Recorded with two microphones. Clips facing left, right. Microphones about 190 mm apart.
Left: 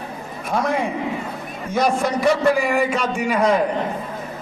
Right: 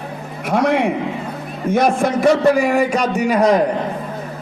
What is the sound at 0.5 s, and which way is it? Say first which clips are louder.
Speech: right 5 dB; 75° right (ahead or behind).